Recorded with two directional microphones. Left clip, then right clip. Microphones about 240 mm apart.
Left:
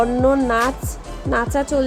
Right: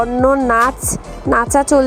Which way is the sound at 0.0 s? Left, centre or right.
Centre.